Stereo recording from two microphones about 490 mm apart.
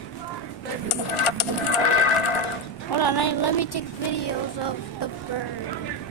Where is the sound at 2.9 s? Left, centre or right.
Left.